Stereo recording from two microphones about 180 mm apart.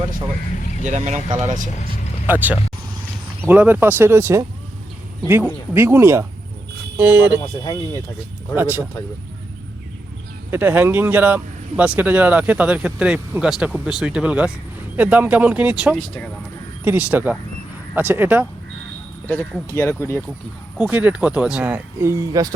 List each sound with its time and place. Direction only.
0.9 s speech: 40° right (ahead or behind)
2.2 s speech: 10° right (ahead or behind)
5.7 s speech: 15° right (ahead or behind)
8.5 s speech: 10° right (ahead or behind)
10.5 s speech: 10° right (ahead or behind)
19.3 s speech: 10° left (ahead or behind)
20.7 s speech: 5° right (ahead or behind)